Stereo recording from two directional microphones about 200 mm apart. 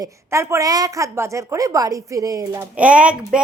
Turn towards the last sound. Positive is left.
turn(degrees=-5)  # may be behind; listen again after turning